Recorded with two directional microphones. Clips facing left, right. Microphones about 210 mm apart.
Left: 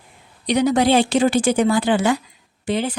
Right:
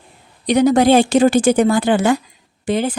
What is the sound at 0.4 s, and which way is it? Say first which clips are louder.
Speech: right 4 dB; 45° right (ahead or behind).